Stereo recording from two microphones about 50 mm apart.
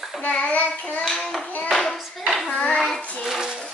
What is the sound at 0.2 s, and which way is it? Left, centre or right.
Child singing, left.